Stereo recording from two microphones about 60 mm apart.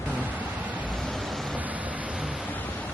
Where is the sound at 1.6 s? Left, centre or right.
Right.